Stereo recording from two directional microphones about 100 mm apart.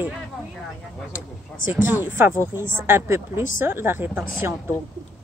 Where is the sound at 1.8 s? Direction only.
20° right (ahead or behind).